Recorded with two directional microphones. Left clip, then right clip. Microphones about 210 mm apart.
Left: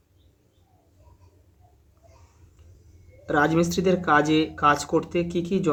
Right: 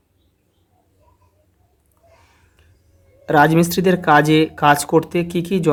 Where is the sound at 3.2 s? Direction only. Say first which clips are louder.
Right 8 dB; 50° right (ahead or behind).